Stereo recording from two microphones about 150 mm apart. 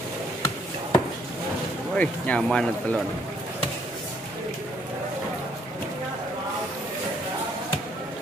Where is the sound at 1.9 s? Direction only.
10° left (ahead or behind).